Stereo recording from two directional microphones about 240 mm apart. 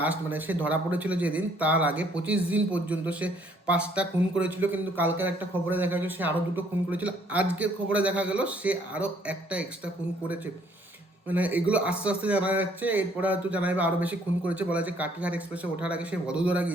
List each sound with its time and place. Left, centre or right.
0.0 s speech: centre